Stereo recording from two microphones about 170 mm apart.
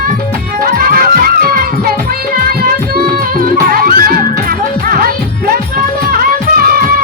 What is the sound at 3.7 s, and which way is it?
Music, 60° right (ahead or behind).